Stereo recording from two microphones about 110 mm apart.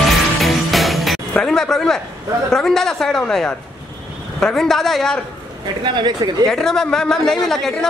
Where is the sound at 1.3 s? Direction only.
5° left (ahead or behind).